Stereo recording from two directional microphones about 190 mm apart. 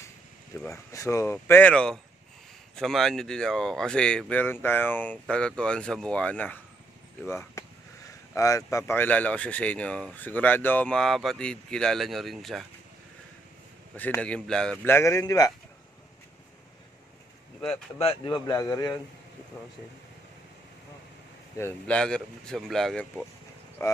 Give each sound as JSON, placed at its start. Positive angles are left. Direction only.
{"t": 0.7, "sound": "speech", "side_deg": 15}
{"t": 13.9, "sound": "speech", "side_deg": 10}
{"t": 17.9, "sound": "speech", "side_deg": 30}
{"t": 21.5, "sound": "speech", "side_deg": 10}
{"t": 23.8, "sound": "speech", "side_deg": 15}